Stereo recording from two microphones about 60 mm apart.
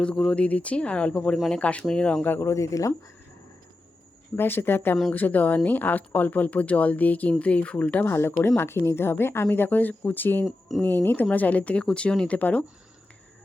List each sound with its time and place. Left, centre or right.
0.0 s speech: centre
2.4 s speech: left
4.4 s speech: left
8.0 s speech: left